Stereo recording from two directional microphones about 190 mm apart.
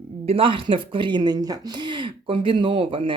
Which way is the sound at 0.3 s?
30° right (ahead or behind).